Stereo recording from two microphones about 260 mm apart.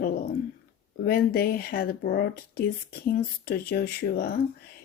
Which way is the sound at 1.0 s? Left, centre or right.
Left.